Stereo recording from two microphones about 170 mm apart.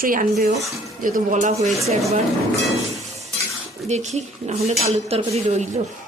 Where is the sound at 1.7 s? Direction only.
Centre (ahead or behind).